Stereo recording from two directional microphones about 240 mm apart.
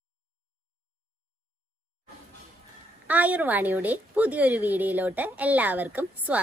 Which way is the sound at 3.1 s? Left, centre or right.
Centre.